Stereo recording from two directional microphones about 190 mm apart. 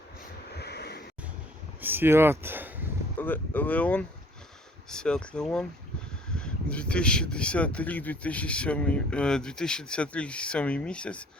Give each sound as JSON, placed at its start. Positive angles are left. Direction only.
{"t": 0.5, "sound": "a sound", "side_deg": 60}
{"t": 1.8, "sound": "speech", "side_deg": -10}
{"t": 3.2, "sound": "speech", "side_deg": 10}